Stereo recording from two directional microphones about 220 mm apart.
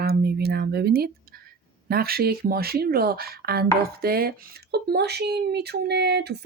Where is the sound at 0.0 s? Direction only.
45° right (ahead or behind).